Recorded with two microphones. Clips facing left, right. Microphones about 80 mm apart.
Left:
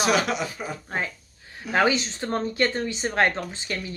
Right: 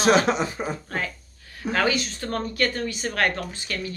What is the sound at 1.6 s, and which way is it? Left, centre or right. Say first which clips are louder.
Speech: left 1 dB; left.